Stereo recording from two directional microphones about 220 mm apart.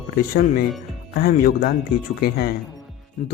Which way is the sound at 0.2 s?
40° left (ahead or behind).